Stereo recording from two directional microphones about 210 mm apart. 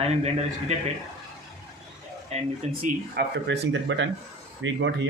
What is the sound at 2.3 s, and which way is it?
Speech, 35° right (ahead or behind).